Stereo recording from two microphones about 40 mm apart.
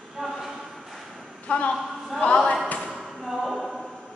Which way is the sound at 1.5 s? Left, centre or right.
Left.